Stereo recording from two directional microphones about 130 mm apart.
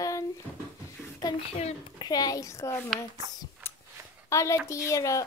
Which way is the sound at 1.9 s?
30° left (ahead or behind).